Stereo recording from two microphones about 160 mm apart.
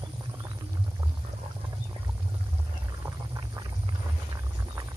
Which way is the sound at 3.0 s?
25° right (ahead or behind).